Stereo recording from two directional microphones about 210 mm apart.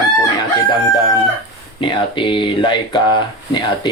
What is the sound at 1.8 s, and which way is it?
Speech, 25° left (ahead or behind).